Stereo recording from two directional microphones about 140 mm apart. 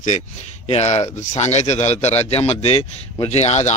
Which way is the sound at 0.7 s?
50° left (ahead or behind).